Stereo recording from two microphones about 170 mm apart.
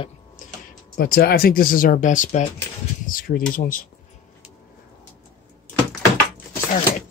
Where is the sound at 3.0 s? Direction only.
55° left (ahead or behind).